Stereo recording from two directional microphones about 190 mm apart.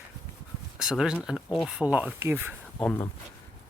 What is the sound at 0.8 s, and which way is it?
Speech, 5° right (ahead or behind).